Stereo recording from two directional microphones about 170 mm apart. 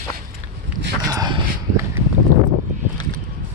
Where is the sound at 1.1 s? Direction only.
20° right (ahead or behind).